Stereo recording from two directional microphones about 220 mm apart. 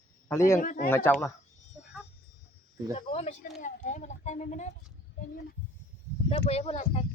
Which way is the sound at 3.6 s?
35° left (ahead or behind).